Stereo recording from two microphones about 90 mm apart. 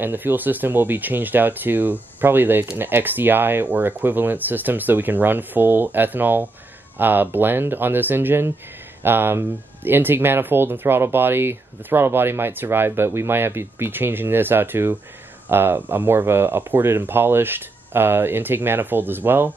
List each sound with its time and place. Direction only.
0.0 s speech: 20° right (ahead or behind)